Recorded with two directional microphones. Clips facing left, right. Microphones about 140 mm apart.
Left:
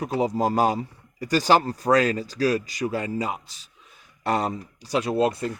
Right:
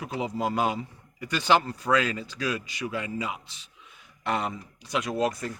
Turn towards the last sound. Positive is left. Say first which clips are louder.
# left 5 dB
turn(degrees=30)  # may be behind; listen again after turning